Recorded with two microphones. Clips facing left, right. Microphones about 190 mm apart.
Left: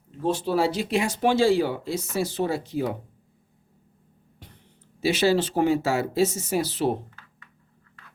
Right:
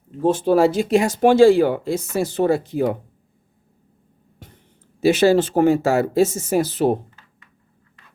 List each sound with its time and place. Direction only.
0.2 s speech: 50° right (ahead or behind)
4.9 s speech: 50° right (ahead or behind)